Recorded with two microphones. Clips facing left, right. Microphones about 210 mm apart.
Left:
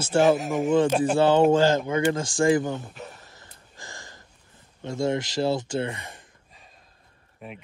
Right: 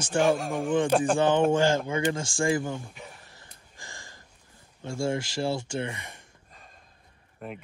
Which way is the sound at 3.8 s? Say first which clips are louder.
Left 4 dB; 20° left (ahead or behind).